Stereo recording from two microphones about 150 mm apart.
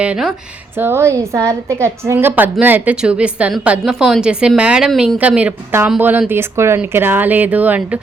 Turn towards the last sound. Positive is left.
turn(degrees=-10)  # may be behind; listen again after turning